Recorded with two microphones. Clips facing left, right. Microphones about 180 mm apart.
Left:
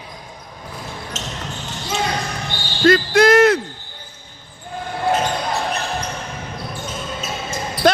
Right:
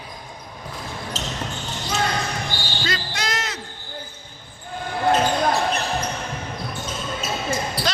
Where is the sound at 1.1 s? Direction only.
35° right (ahead or behind).